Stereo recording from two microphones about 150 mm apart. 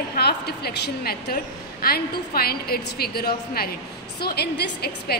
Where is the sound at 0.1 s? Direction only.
90° left.